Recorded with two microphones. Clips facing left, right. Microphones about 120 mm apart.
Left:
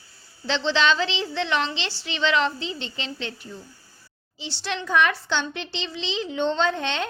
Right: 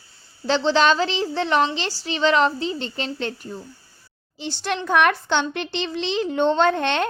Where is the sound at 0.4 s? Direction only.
40° right (ahead or behind).